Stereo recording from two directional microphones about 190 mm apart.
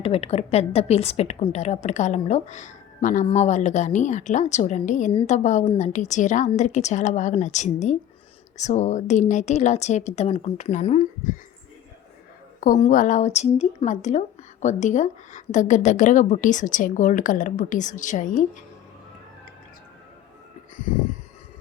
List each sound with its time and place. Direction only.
0.0 s a woman's voice: 30° left (ahead or behind)
12.5 s a woman's voice: 45° left (ahead or behind)